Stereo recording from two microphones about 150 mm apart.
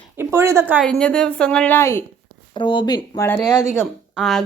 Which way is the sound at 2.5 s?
35° left (ahead or behind).